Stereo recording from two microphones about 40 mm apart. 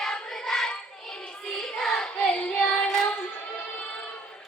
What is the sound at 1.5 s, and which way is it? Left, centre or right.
Child singing, centre.